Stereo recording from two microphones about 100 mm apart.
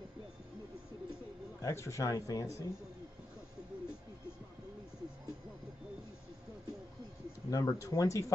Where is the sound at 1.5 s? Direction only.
30° left (ahead or behind).